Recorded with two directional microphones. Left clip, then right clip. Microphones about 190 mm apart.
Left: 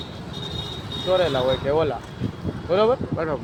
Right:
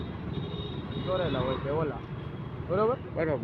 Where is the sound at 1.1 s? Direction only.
65° left (ahead or behind).